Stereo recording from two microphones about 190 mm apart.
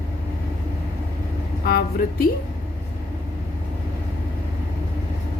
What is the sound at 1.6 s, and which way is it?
Speech, 55° left (ahead or behind).